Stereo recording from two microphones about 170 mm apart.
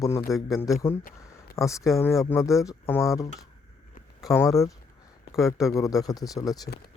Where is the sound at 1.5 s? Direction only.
20° left (ahead or behind).